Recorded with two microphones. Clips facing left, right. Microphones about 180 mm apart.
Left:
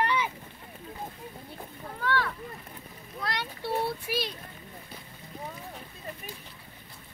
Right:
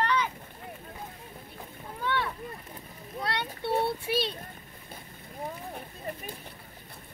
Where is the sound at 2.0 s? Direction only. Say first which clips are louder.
Left 1 dB; 20° right (ahead or behind).